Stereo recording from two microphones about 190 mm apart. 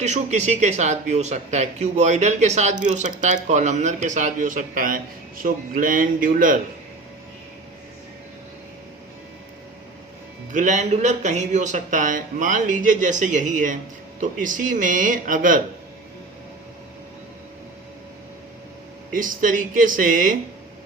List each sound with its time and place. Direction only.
0.0 s speech: 35° right (ahead or behind)
10.5 s speech: 40° right (ahead or behind)
19.1 s speech: 45° right (ahead or behind)